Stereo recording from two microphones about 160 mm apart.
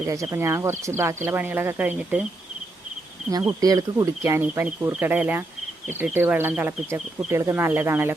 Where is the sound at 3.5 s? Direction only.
20° right (ahead or behind).